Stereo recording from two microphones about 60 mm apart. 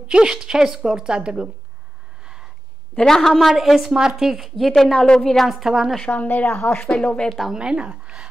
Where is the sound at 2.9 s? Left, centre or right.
Centre.